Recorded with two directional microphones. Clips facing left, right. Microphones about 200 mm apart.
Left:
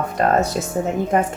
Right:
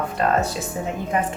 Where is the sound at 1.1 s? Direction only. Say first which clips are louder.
Left 4 dB; 45° left (ahead or behind).